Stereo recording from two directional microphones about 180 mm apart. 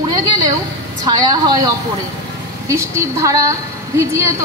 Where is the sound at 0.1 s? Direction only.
20° right (ahead or behind).